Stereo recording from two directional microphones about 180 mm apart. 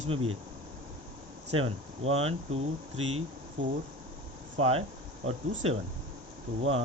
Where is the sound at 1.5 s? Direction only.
35° right (ahead or behind).